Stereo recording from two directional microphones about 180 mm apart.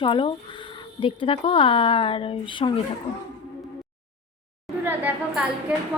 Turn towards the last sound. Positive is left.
turn(degrees=-5)  # may be behind; listen again after turning